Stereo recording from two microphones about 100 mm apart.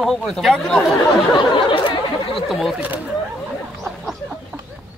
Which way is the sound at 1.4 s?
55° left (ahead or behind).